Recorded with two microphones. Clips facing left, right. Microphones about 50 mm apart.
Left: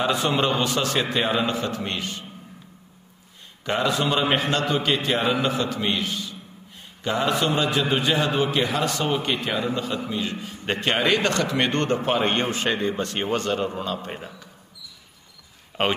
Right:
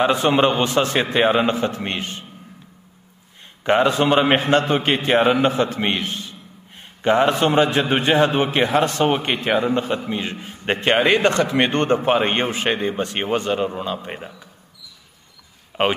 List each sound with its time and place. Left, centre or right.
0.0 s a man's voice: right
3.6 s a man's voice: right; by 14.5 s centre
15.7 s speech: centre